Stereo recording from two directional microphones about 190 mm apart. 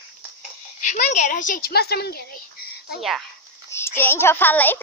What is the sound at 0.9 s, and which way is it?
Speech, 40° left (ahead or behind).